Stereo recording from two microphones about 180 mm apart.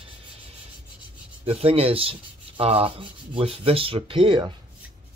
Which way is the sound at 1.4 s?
35° right (ahead or behind).